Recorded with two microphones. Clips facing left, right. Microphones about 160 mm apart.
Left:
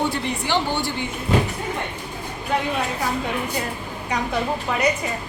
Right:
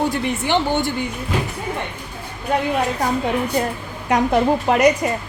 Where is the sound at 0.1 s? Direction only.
55° right (ahead or behind).